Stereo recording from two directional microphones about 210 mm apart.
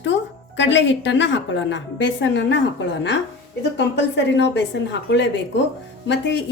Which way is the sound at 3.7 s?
55° left (ahead or behind).